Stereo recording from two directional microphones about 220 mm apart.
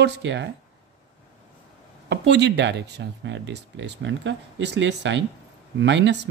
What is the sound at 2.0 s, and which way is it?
Speech, 50° right (ahead or behind).